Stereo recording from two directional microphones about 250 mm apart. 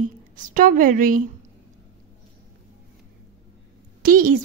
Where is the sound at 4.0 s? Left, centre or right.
Right.